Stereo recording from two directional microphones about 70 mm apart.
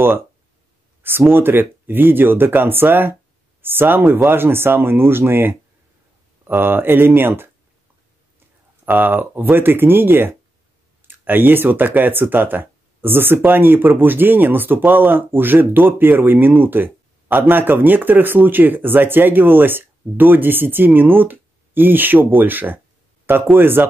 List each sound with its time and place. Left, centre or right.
1.3 s speech: right
8.8 s speech: right